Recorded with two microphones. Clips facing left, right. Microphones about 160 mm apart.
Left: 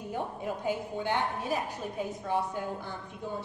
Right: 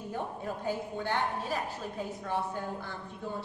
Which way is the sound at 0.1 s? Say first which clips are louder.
Left 2 dB; 15° left (ahead or behind).